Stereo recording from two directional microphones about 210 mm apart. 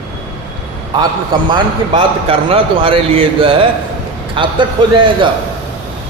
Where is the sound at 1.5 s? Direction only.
25° right (ahead or behind).